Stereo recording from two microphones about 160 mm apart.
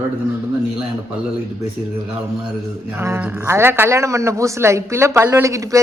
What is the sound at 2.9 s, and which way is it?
A man's voice, 15° right (ahead or behind).